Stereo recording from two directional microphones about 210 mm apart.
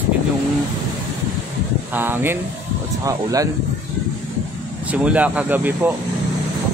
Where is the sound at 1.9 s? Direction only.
10° right (ahead or behind).